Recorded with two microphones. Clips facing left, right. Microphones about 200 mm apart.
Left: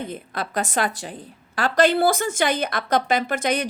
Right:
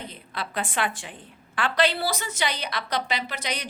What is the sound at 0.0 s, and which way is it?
A woman's voice, 45° left (ahead or behind).